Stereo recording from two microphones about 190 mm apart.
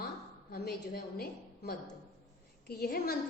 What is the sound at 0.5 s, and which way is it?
A woman's voice, 55° left (ahead or behind).